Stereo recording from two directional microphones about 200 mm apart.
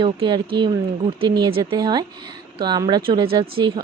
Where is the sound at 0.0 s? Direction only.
25° right (ahead or behind).